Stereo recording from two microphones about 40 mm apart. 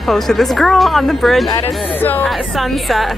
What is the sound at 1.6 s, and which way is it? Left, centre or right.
Speech, left.